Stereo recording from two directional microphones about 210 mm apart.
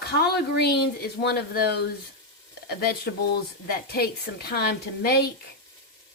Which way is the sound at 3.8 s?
50° left (ahead or behind).